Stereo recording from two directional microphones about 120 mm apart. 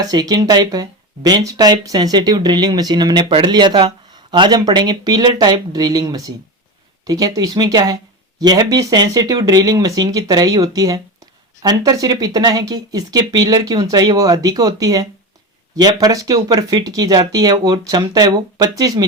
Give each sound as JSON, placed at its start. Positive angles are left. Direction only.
{"t": 0.0, "sound": "speech", "side_deg": -30}